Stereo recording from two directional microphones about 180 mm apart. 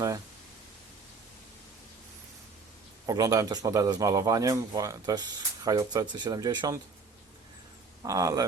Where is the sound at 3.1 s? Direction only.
20° right (ahead or behind).